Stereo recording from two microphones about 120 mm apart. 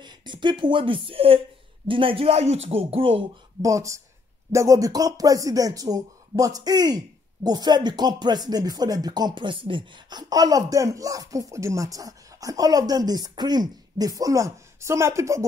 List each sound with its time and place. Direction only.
0.0 s speech: 40° right (ahead or behind)
3.6 s speech: 25° right (ahead or behind)